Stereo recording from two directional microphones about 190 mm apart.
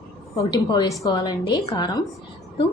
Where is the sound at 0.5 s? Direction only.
20° left (ahead or behind).